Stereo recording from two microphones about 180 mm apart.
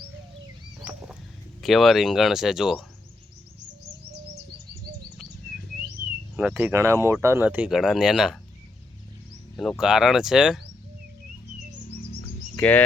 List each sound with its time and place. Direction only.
1.6 s speech: centre (ahead or behind)
6.3 s speech: 5° right (ahead or behind)
9.6 s speech: centre (ahead or behind)
12.5 s speech: 10° left (ahead or behind)